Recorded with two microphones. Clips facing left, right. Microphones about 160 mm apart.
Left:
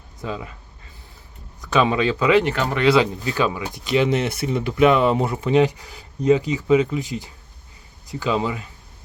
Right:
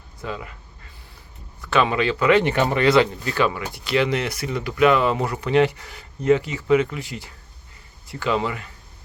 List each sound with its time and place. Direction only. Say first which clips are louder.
0.2 s speech: left 2 dB; 20° left (ahead or behind)
1.9 s speech: left 1 dB; 20° left (ahead or behind)
2.6 s speech: right 3 dB; 10° right (ahead or behind)
2.8 s speech: left 2 dB; 10° left (ahead or behind)